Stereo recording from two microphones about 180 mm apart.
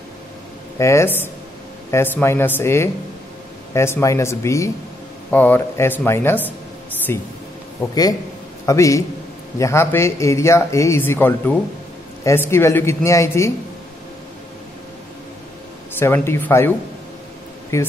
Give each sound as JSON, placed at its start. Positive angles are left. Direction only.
{"t": 0.7, "sound": "a man's voice", "side_deg": 15}
{"t": 16.0, "sound": "speech", "side_deg": 10}